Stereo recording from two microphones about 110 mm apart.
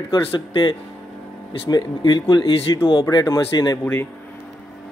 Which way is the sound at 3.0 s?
35° left (ahead or behind).